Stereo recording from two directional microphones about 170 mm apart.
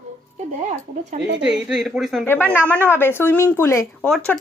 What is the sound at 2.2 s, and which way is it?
A woman's voice, 10° left (ahead or behind).